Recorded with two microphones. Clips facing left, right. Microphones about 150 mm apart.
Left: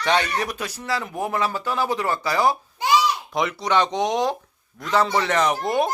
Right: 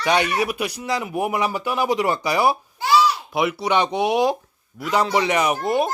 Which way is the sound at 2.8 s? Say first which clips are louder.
Right 2 dB; 20° left (ahead or behind).